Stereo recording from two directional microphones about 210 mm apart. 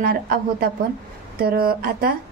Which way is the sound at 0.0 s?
45° right (ahead or behind).